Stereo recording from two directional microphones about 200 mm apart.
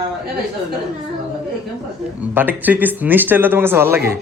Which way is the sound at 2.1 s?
10° right (ahead or behind).